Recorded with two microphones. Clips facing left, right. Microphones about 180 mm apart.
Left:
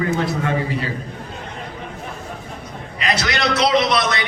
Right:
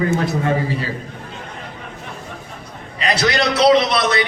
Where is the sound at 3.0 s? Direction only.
30° right (ahead or behind).